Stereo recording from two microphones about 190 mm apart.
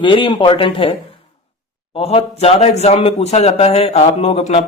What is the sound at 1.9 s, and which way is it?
Speech, 30° left (ahead or behind).